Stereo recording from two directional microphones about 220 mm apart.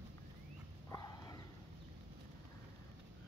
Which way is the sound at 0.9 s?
15° left (ahead or behind).